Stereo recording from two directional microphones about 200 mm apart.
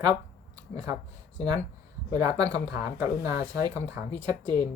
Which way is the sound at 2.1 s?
15° right (ahead or behind).